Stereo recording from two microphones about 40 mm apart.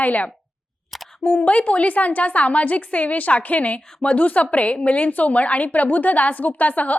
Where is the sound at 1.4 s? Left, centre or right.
Left.